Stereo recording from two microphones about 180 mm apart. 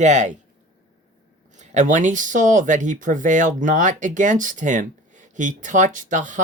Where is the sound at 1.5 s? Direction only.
40° right (ahead or behind).